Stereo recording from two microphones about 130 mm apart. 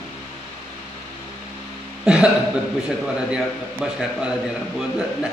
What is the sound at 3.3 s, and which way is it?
A man's voice, 5° right (ahead or behind).